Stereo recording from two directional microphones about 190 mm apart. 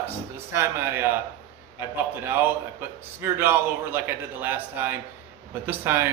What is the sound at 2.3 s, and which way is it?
A man's voice, 10° right (ahead or behind).